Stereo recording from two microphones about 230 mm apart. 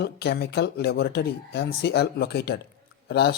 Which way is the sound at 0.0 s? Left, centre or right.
Left.